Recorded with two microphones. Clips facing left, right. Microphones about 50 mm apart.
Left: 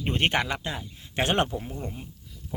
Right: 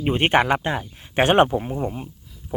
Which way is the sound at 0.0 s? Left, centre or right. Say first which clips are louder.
Right 5 dB; centre.